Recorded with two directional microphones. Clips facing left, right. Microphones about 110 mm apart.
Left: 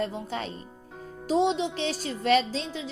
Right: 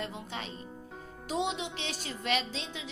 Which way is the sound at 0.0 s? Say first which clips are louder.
Left 8 dB; 40° left (ahead or behind).